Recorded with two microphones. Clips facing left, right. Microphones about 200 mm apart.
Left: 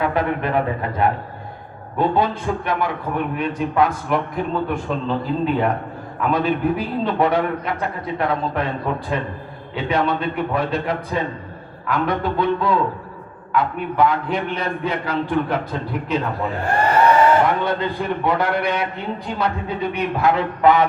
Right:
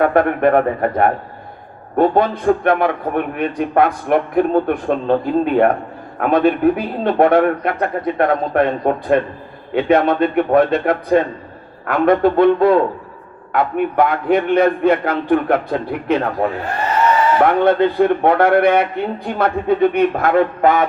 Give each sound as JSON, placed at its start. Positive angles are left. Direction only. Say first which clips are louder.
{"t": 0.0, "sound": "a man's voice", "louder": "right 7 dB", "side_deg": -55}